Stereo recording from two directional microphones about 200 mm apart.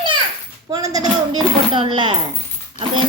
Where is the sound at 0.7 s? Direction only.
15° right (ahead or behind).